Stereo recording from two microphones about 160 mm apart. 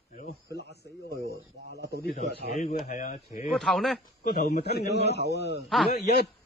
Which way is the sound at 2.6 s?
50° left (ahead or behind).